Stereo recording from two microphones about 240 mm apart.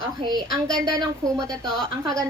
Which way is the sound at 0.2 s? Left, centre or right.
Centre.